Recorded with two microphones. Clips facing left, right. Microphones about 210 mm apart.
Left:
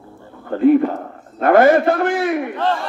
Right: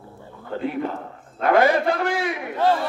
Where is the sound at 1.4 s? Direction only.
50° left (ahead or behind).